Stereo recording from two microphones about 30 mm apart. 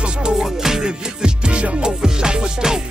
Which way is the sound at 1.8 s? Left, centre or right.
Right.